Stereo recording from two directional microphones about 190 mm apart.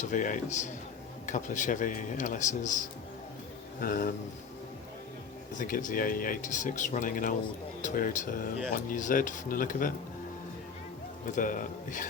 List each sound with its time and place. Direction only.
0.0 s speech: 45° left (ahead or behind)
5.5 s speech: 45° left (ahead or behind)
11.3 s speech: 45° left (ahead or behind)